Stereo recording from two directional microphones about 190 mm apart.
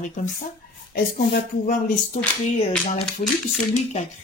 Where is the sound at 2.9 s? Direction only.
40° left (ahead or behind).